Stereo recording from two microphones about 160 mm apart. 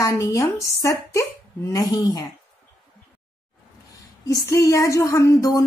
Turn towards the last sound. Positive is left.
turn(degrees=20)  # may be behind; listen again after turning